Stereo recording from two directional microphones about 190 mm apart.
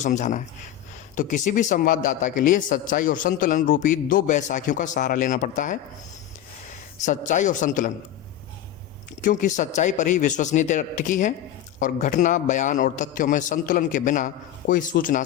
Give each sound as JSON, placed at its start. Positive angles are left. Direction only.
{"t": 0.0, "sound": "a man's voice", "side_deg": 40}
{"t": 7.0, "sound": "a man's voice", "side_deg": 40}
{"t": 9.2, "sound": "a man's voice", "side_deg": 40}